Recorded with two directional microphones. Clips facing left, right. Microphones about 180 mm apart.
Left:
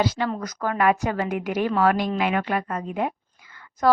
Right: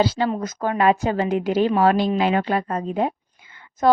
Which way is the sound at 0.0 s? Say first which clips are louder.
Right 4 dB; 30° right (ahead or behind).